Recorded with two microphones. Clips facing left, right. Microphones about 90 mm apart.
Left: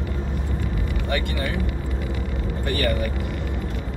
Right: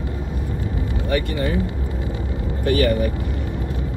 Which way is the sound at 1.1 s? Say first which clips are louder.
Right 5 dB; 20° right (ahead or behind).